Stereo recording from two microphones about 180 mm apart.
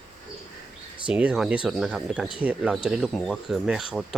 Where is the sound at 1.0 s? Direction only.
5° right (ahead or behind).